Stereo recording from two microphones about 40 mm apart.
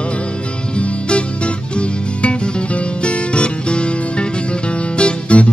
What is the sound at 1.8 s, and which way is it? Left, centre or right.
Music, left.